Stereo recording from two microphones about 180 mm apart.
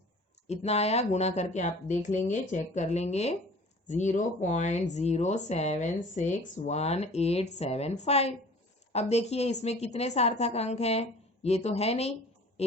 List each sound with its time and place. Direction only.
0.4 s a woman's voice: 35° left (ahead or behind)